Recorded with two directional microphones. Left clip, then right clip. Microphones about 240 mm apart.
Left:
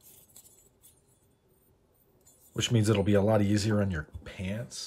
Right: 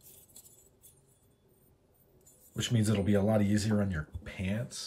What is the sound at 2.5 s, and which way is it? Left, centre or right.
Speech, centre.